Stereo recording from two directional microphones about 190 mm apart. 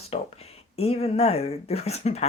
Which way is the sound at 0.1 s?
35° left (ahead or behind).